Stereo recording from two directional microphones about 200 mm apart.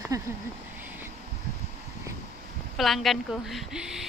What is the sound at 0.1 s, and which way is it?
Speech, 15° right (ahead or behind).